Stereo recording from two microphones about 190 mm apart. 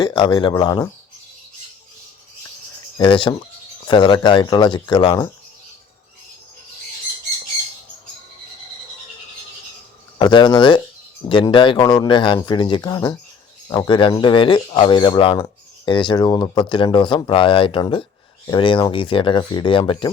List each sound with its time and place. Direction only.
0.0 s speech: 20° left (ahead or behind)
3.0 s speech: 25° left (ahead or behind)
10.2 s speech: 25° left (ahead or behind)